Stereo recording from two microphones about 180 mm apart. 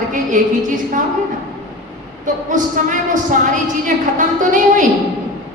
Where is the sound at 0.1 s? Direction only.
45° right (ahead or behind).